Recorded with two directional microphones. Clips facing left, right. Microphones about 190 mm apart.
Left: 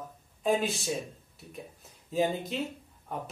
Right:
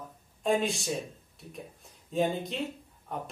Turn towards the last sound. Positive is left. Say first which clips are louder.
# right 2 dB
turn(degrees=0)  # may be behind; listen again after turning